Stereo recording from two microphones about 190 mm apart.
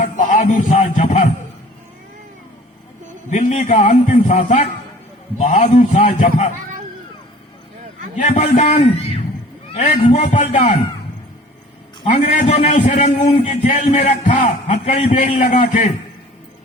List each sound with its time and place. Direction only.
0.2 s speech: 40° left (ahead or behind)
3.2 s a man's voice: 40° left (ahead or behind)
8.1 s a man's voice: 40° left (ahead or behind)
12.0 s a man's voice: 40° left (ahead or behind)